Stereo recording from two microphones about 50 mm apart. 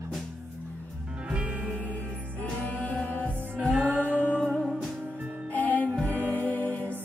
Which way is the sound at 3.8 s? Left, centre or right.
Right.